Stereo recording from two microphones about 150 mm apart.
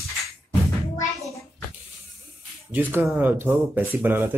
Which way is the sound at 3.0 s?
10° right (ahead or behind).